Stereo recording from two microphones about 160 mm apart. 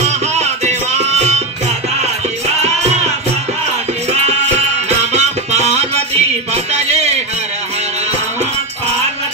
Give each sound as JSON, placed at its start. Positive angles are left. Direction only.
{"t": 0.0, "sound": "music", "side_deg": -45}
{"t": 4.8, "sound": "music", "side_deg": -45}